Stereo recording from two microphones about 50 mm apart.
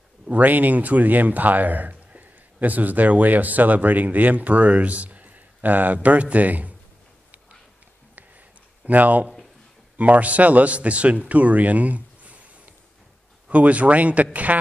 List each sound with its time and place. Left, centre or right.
0.3 s a man's voice: right
8.8 s a man's voice: right
13.5 s a man's voice: right